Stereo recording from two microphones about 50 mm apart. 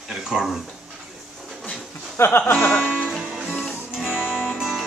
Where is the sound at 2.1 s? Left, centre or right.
Left.